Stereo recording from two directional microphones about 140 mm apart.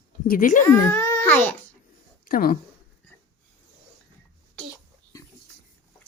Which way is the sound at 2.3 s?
90° left.